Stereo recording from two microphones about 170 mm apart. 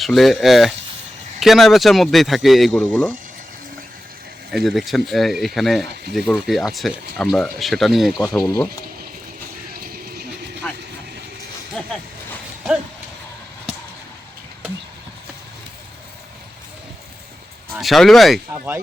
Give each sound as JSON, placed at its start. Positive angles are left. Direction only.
{"t": 0.0, "sound": "speech", "side_deg": 0}
{"t": 4.5, "sound": "speech", "side_deg": 0}
{"t": 8.4, "sound": "speech", "side_deg": 20}
{"t": 9.8, "sound": "music", "side_deg": -60}
{"t": 10.6, "sound": "vehicle", "side_deg": 5}
{"t": 11.8, "sound": "a sound", "side_deg": 5}
{"t": 17.7, "sound": "speech", "side_deg": 0}